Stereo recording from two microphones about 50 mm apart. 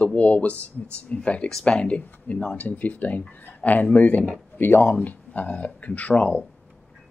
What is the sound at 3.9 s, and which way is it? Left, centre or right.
Speech, left.